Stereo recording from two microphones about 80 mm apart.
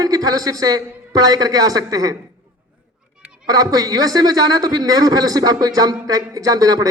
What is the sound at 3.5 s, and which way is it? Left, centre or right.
A man's voice, right.